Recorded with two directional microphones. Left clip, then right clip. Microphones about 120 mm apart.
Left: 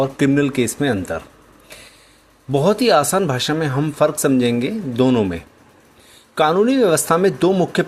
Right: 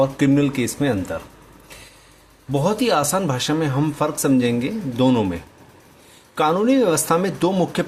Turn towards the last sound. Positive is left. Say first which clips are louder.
# left 3 dB
turn(degrees=40)  # may be behind; listen again after turning